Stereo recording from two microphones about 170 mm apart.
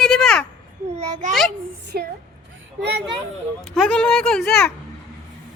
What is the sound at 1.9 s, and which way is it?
Speech, 60° right (ahead or behind).